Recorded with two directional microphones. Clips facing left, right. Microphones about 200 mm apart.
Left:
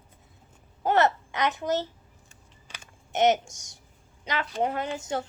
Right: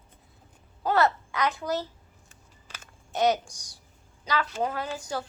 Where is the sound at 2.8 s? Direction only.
20° left (ahead or behind).